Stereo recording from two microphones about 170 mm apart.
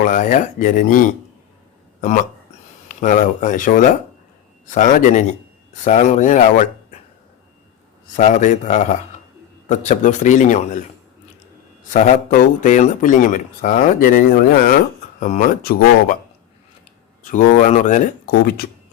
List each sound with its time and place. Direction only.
0.0 s speech: 50° left (ahead or behind)
8.1 s speech: 45° left (ahead or behind)
11.9 s speech: 50° left (ahead or behind)
17.2 s speech: 55° left (ahead or behind)